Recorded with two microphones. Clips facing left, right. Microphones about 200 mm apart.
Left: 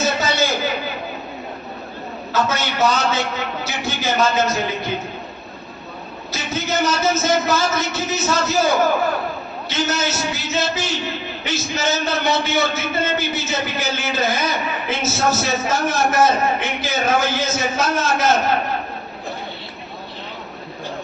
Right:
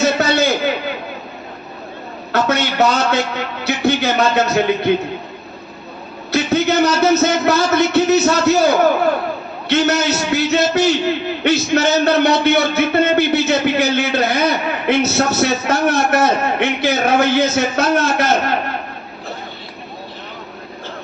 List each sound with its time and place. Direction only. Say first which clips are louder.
0.0 s a sound: right 5 dB; 60° right (ahead or behind)
2.3 s a man's voice: right 4 dB; 60° right (ahead or behind)
6.3 s a man's voice: right 9 dB; 65° right (ahead or behind)
9.6 s a man's voice: right 7 dB; 65° right (ahead or behind)